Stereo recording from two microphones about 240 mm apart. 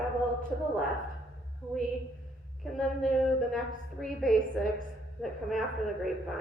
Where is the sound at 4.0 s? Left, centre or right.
Centre.